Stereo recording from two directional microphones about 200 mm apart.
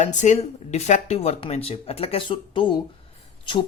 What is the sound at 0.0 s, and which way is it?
Speech, 35° left (ahead or behind).